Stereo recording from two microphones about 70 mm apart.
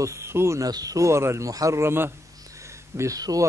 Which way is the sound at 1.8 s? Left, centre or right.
Right.